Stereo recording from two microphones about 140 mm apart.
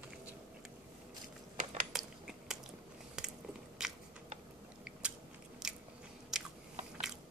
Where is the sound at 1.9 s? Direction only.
Centre (ahead or behind).